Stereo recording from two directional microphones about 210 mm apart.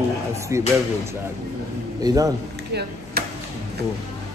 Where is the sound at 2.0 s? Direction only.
15° right (ahead or behind).